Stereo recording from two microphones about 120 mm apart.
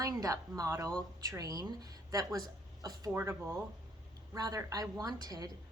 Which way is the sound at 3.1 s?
20° right (ahead or behind).